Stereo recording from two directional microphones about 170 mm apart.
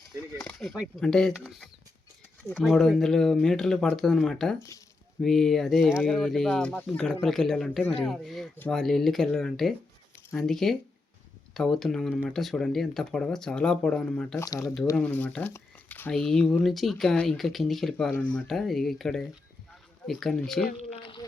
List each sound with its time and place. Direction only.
0.2 s speech: 15° left (ahead or behind)
0.6 s speech: centre (ahead or behind)
14.3 s speech: 20° left (ahead or behind)
14.9 s speech: 10° left (ahead or behind)
21.0 s a sound: 30° left (ahead or behind)